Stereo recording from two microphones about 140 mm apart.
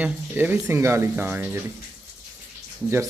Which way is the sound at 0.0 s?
15° right (ahead or behind).